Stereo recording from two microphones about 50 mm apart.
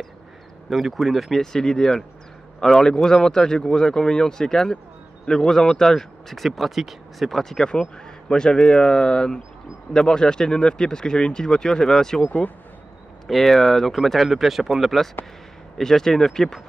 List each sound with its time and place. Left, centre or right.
0.7 s speech: centre
12.3 s speech: left
13.3 s speech: centre